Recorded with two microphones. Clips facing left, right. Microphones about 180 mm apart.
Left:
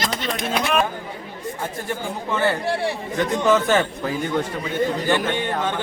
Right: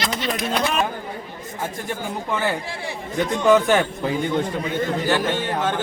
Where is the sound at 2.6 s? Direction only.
65° left (ahead or behind).